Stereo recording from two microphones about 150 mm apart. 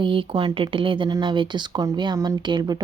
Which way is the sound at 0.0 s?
35° right (ahead or behind).